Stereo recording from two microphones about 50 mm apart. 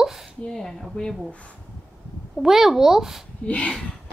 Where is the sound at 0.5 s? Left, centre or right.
Centre.